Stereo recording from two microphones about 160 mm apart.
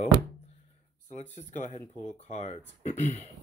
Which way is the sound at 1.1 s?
45° left (ahead or behind).